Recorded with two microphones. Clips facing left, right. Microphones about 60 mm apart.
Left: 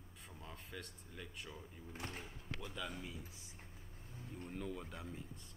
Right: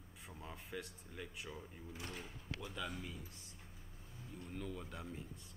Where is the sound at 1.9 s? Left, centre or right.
Left.